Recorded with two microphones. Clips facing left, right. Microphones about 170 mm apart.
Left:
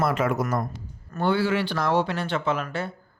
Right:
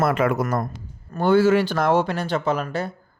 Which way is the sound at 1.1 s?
45° right (ahead or behind).